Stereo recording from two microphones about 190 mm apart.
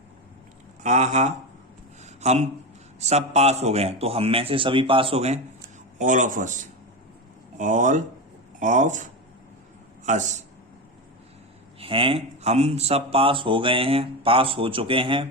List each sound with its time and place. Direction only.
0.8 s a man's voice: 40° right (ahead or behind)
2.0 s a sound: 35° right (ahead or behind)
3.0 s a man's voice: 35° right (ahead or behind)
10.1 s a man's voice: 40° right (ahead or behind)
11.8 s speech: 30° right (ahead or behind)